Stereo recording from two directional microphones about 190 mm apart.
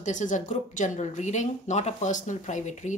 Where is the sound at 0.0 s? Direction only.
40° left (ahead or behind).